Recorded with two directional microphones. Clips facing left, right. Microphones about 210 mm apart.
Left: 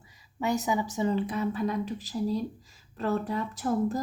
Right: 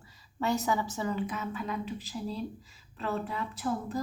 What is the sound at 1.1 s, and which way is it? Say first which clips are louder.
A woman's voice: left 5 dB; 35° left (ahead or behind).